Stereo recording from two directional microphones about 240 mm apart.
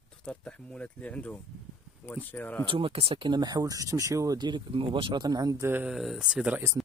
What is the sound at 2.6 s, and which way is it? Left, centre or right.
Speech, right.